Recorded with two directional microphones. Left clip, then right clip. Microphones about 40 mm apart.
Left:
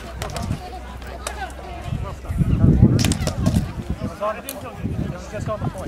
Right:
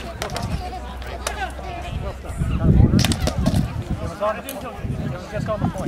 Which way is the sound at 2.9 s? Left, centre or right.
Centre.